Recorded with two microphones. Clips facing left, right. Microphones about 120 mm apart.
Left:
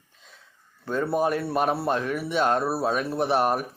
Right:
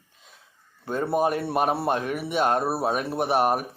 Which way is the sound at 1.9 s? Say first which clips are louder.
Even; 50° right (ahead or behind).